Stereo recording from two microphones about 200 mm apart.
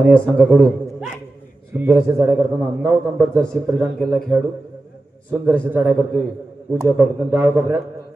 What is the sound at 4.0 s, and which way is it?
A man's voice, centre (ahead or behind).